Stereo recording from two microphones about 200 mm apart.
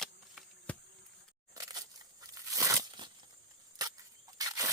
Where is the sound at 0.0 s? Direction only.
5° left (ahead or behind).